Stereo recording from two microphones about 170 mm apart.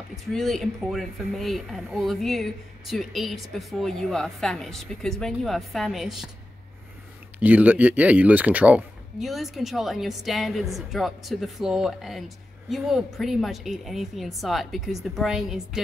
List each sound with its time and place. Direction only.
0.3 s speech: centre (ahead or behind)
7.3 s speech: 10° right (ahead or behind)